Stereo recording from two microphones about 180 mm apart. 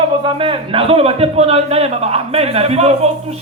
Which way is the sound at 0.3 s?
30° right (ahead or behind).